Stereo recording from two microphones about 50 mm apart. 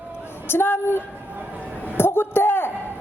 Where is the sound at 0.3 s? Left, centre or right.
Left.